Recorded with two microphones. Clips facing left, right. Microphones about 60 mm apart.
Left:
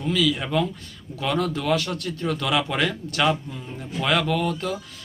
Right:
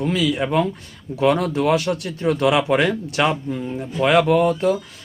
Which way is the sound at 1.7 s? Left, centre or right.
Centre.